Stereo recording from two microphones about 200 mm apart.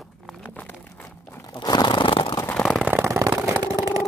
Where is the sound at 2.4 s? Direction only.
5° left (ahead or behind); by 3.4 s 15° right (ahead or behind).